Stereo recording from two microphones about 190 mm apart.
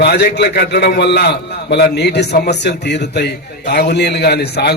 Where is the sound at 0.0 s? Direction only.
60° left (ahead or behind).